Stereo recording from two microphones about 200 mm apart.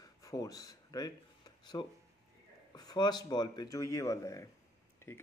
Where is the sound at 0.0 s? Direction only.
15° left (ahead or behind).